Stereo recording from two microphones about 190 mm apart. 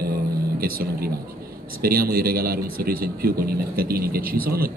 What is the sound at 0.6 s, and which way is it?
Speech, 50° right (ahead or behind).